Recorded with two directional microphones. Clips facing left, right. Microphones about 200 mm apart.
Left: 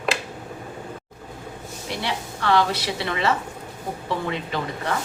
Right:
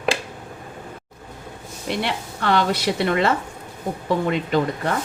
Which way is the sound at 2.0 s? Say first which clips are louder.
Even; 50° right (ahead or behind).